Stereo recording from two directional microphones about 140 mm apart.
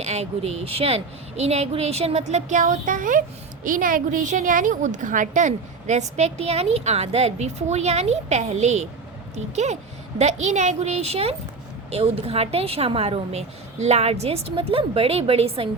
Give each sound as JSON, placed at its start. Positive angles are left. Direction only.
{"t": 0.0, "sound": "a woman's voice", "side_deg": -50}